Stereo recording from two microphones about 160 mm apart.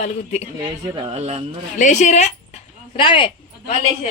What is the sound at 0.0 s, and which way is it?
Speech, 45° left (ahead or behind).